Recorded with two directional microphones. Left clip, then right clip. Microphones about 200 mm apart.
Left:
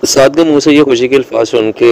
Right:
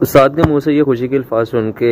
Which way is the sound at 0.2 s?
40° left (ahead or behind).